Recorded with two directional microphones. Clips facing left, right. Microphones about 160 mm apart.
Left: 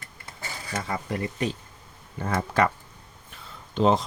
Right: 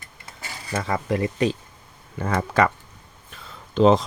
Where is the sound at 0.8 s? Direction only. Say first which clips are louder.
Right 7 dB; 90° right.